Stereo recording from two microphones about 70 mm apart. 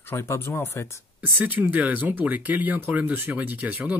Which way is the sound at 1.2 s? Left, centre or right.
Right.